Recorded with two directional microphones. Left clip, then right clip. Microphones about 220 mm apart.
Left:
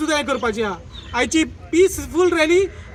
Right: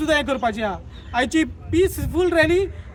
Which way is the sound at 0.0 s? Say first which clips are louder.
Even; 25° right (ahead or behind).